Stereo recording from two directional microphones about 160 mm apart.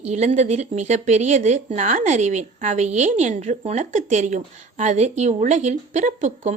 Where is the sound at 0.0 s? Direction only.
45° right (ahead or behind).